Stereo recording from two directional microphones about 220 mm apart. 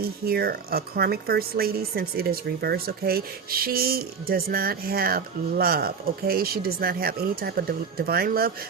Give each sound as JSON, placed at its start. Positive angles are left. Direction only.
{"t": 0.0, "sound": "speech", "side_deg": -45}